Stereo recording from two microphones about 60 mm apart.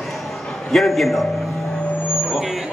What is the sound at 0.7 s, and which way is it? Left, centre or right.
Speech, centre.